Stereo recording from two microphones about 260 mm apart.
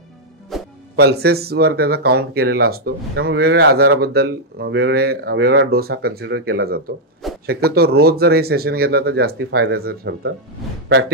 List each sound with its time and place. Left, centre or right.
0.5 s music: centre
0.9 s speech: right